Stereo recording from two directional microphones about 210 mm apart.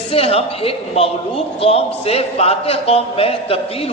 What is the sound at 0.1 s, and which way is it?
A man's voice, 30° left (ahead or behind).